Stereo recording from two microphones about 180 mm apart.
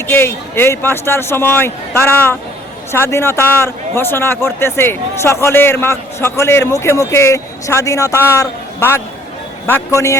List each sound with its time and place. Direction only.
0.1 s a man's voice: 15° left (ahead or behind)